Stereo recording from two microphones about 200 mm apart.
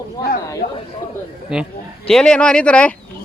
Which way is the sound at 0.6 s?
50° left (ahead or behind).